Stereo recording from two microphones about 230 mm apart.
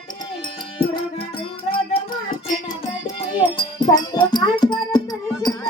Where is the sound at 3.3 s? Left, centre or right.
Left.